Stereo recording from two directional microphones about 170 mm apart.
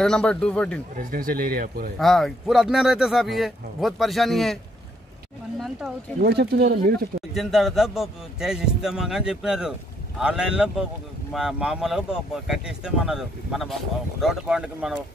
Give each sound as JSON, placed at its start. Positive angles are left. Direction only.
{"t": 0.0, "sound": "a man's voice", "side_deg": 5}
{"t": 0.9, "sound": "speech", "side_deg": -55}
{"t": 2.0, "sound": "a man's voice", "side_deg": 0}
{"t": 5.6, "sound": "a man's voice", "side_deg": 0}
{"t": 6.2, "sound": "speech", "side_deg": -75}
{"t": 7.3, "sound": "a man's voice", "side_deg": 0}